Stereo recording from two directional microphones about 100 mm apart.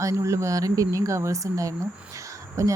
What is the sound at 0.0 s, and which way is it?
Speech, 30° right (ahead or behind).